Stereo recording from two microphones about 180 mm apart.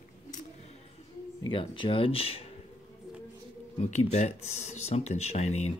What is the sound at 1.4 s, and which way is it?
Speech, 30° left (ahead or behind).